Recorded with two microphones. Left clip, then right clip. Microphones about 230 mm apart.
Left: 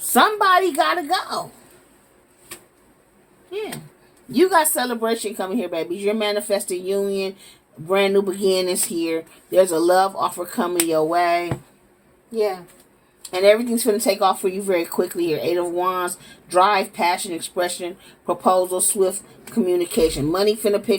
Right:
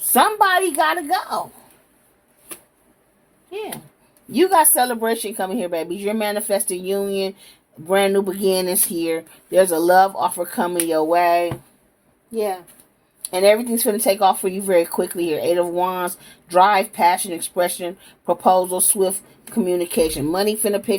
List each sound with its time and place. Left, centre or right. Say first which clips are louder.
0.1 s a woman's voice: even; right
4.3 s speech: right 1 dB; right
13.3 s speech: even; right